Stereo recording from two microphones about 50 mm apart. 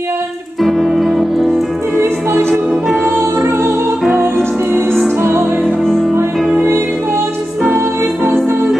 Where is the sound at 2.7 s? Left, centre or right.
Centre.